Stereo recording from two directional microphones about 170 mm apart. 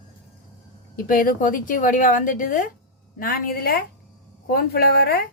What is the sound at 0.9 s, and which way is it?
A woman's voice, 55° left (ahead or behind).